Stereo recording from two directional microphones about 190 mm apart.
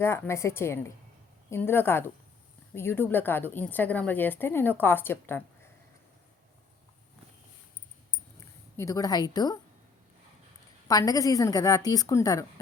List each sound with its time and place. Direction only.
0.0 s a woman's voice: 15° left (ahead or behind)
8.4 s a woman's voice: 15° left (ahead or behind)
10.8 s a woman's voice: 20° left (ahead or behind)